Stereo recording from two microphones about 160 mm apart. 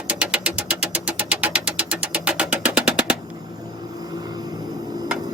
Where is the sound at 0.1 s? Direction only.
5° right (ahead or behind).